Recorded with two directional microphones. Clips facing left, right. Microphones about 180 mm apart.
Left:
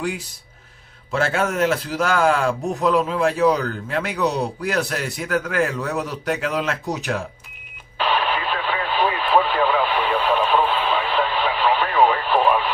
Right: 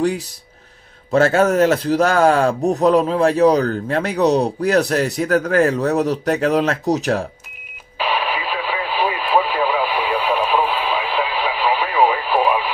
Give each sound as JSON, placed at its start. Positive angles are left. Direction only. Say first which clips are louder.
{"t": 1.1, "sound": "a man's voice", "louder": "right 7 dB", "side_deg": -40}
{"t": 8.0, "sound": "radio", "louder": "even", "side_deg": -5}